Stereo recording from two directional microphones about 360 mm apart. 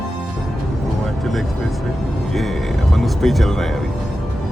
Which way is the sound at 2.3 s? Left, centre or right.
Centre.